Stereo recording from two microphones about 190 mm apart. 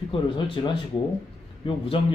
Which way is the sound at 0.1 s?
25° left (ahead or behind).